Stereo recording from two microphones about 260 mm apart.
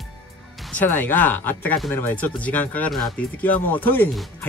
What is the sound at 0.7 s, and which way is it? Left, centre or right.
Speech, centre.